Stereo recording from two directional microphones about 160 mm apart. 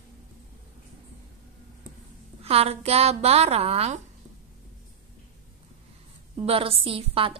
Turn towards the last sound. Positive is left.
turn(degrees=-35)  # may be behind; listen again after turning